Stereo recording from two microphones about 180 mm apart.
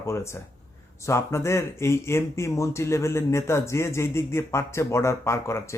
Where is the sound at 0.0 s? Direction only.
15° left (ahead or behind).